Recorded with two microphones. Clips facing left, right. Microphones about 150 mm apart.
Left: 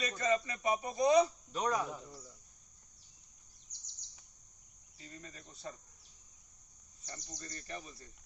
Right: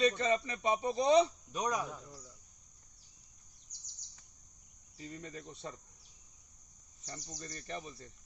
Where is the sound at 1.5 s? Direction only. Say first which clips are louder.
Left 1 dB; 15° right (ahead or behind).